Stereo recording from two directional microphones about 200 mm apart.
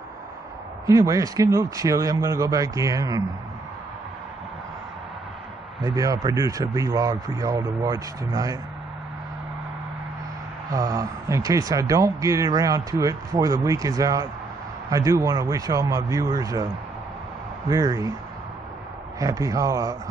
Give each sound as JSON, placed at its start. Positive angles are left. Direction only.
{"t": 0.8, "sound": "speech", "side_deg": -15}
{"t": 5.9, "sound": "speech", "side_deg": -15}
{"t": 10.7, "sound": "speech", "side_deg": -15}
{"t": 17.6, "sound": "speech", "side_deg": -15}
{"t": 19.1, "sound": "speech", "side_deg": -15}